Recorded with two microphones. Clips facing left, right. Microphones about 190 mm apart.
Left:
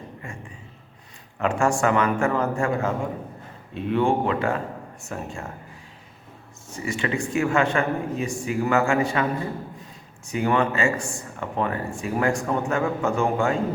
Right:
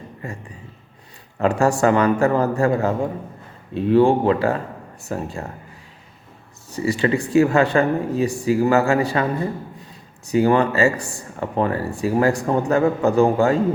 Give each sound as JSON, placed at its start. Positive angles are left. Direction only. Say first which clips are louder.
{"t": 0.2, "sound": "a sound", "louder": "right 8 dB", "side_deg": -35}
{"t": 1.4, "sound": "speech", "louder": "right 4 dB", "side_deg": -35}
{"t": 6.7, "sound": "speech", "louder": "right 7 dB", "side_deg": -35}
{"t": 10.2, "sound": "speech", "louder": "right 6 dB", "side_deg": -35}